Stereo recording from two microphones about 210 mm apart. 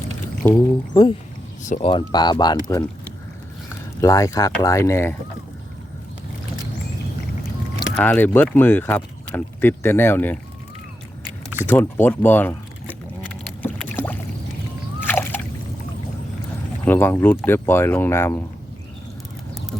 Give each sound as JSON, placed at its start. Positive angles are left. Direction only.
{"t": 0.4, "sound": "speech", "side_deg": 15}
{"t": 1.6, "sound": "speech", "side_deg": 35}
{"t": 1.9, "sound": "speech", "side_deg": 20}
{"t": 4.0, "sound": "speech", "side_deg": 15}
{"t": 7.9, "sound": "speech", "side_deg": 10}
{"t": 11.6, "sound": "speech", "side_deg": 10}
{"t": 13.6, "sound": "boat", "side_deg": 10}
{"t": 15.0, "sound": "splash", "side_deg": 10}
{"t": 16.8, "sound": "speech", "side_deg": 10}